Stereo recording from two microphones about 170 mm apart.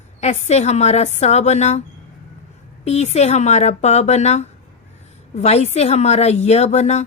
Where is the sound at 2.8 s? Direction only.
40° left (ahead or behind).